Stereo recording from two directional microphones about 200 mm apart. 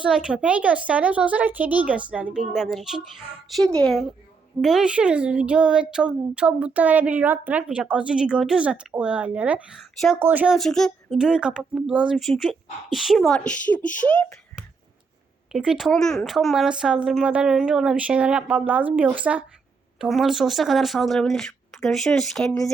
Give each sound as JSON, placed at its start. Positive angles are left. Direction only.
{"t": 0.0, "sound": "speech", "side_deg": -5}
{"t": 15.5, "sound": "speech", "side_deg": -5}